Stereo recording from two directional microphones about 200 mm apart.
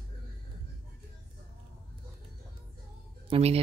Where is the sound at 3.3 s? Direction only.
30° right (ahead or behind).